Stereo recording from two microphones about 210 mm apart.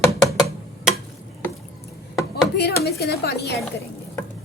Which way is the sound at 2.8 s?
50° left (ahead or behind).